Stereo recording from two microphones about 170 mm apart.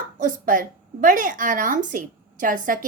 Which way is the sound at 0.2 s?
55° right (ahead or behind).